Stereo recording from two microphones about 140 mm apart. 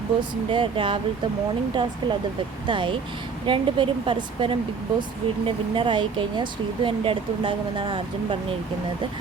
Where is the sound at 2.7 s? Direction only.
35° right (ahead or behind).